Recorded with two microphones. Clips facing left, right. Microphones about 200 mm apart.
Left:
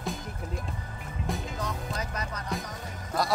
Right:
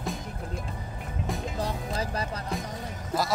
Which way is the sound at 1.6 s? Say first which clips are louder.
Right 3 dB; 30° right (ahead or behind).